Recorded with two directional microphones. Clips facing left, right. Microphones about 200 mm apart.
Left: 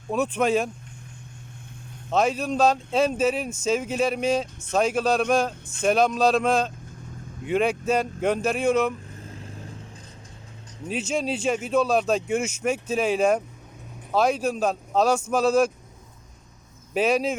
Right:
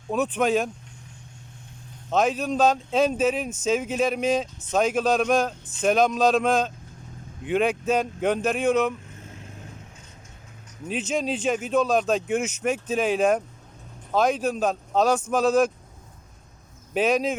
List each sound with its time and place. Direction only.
0.1 s speech: centre (ahead or behind)
2.0 s speech: centre (ahead or behind)
9.2 s vehicle: 35° left (ahead or behind)
11.1 s speech: centre (ahead or behind)
16.9 s speech: centre (ahead or behind)